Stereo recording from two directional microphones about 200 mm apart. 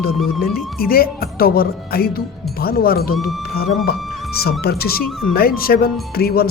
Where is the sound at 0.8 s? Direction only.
50° left (ahead or behind).